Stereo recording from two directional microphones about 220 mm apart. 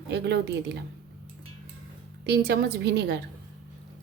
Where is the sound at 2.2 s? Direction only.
45° right (ahead or behind).